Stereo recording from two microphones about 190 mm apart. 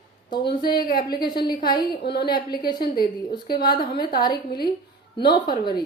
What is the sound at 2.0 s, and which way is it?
Speech, 60° left (ahead or behind).